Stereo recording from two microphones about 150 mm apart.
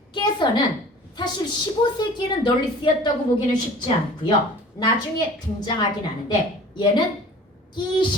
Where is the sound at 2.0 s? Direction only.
30° left (ahead or behind).